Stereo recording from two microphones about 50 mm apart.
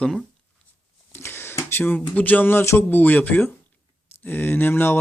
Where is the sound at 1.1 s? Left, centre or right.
Left.